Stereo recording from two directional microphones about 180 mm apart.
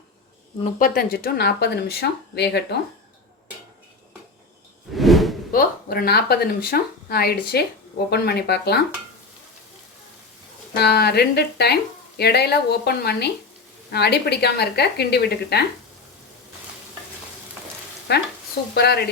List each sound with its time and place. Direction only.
0.6 s a woman's voice: 50° left (ahead or behind)
4.9 s whoosh: centre (ahead or behind)
5.5 s a woman's voice: 55° left (ahead or behind)
10.8 s a woman's voice: 65° left (ahead or behind)
18.1 s a woman's voice: 65° left (ahead or behind)